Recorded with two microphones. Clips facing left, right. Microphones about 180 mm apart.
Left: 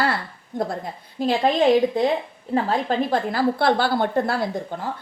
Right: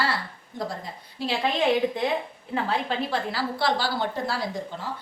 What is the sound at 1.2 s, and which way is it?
Speech, 50° left (ahead or behind).